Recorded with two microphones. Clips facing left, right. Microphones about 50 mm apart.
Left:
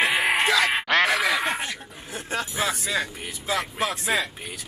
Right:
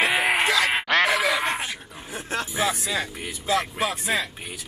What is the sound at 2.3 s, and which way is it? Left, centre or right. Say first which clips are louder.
A man's voice: right 1 dB; centre.